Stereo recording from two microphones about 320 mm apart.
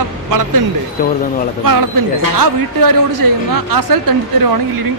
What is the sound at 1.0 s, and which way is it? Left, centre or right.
Speech, left.